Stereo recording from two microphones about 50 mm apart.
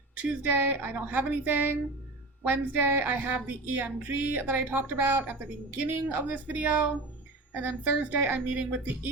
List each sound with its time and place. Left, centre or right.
0.2 s speech: right